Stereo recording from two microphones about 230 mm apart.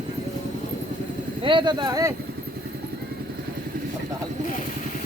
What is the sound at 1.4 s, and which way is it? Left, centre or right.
Speech, right.